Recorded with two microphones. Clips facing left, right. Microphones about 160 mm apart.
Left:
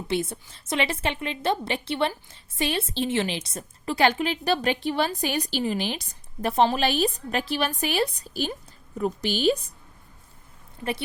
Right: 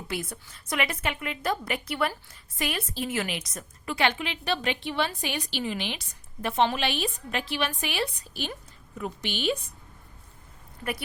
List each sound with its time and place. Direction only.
0.1 s a woman's voice: 25° left (ahead or behind)